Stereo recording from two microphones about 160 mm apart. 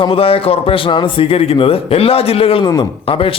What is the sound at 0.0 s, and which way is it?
A man's voice, 35° left (ahead or behind).